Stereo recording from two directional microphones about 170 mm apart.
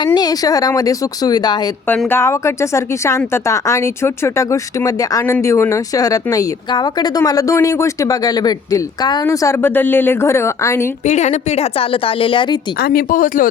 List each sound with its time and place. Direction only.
0.0 s speech: 25° left (ahead or behind)
11.0 s a woman's voice: 45° left (ahead or behind)
12.8 s speech: 60° left (ahead or behind)